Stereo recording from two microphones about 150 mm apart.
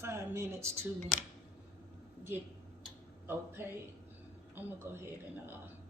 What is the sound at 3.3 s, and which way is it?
Speech, 15° right (ahead or behind).